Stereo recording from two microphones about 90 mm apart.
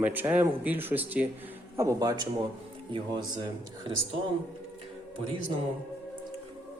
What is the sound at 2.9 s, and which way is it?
Speech, 60° right (ahead or behind).